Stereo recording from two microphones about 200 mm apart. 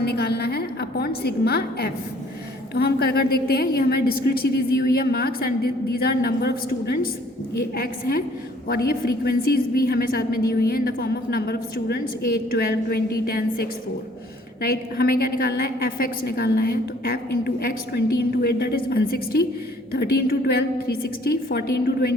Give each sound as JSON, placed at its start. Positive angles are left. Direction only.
{"t": 0.0, "sound": "a woman's voice", "side_deg": 50}